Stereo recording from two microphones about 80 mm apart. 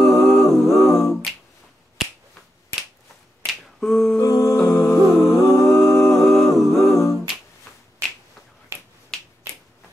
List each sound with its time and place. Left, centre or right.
0.0 s a capella: centre
3.4 s finger snapping: centre
4.2 s music: left
4.6 s music: centre
5.7 s a capella: centre
8.7 s finger snapping: right
9.1 s finger snapping: centre